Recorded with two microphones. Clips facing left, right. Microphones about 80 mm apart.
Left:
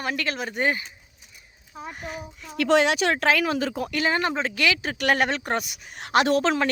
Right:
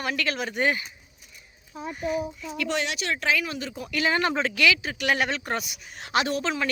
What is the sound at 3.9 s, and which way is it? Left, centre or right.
A woman's voice, left.